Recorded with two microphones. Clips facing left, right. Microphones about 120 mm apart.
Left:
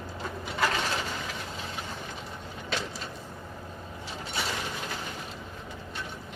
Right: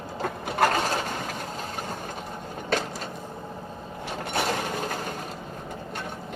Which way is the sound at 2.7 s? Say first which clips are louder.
Right 7 dB; 45° right (ahead or behind).